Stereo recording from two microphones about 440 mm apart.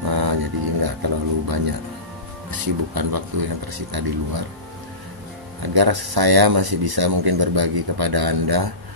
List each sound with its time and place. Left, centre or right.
0.1 s a sound: right
2.5 s speech: right
5.6 s speech: right